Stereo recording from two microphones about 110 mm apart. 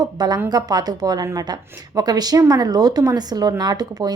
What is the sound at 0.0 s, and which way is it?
Speech, 40° right (ahead or behind).